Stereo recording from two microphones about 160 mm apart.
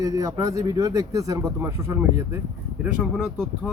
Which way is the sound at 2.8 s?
5° right (ahead or behind).